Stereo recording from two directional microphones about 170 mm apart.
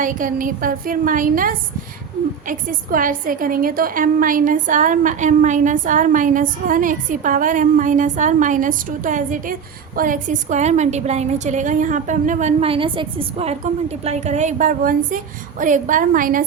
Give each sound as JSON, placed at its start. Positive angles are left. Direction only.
{"t": 0.0, "sound": "a woman's voice", "side_deg": -50}